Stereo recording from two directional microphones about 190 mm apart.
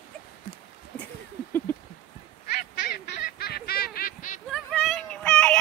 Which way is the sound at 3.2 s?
55° left (ahead or behind).